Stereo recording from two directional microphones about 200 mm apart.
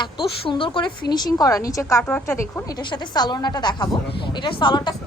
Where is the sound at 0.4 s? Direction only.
25° left (ahead or behind).